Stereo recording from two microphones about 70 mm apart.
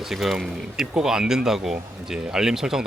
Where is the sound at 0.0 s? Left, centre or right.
Centre.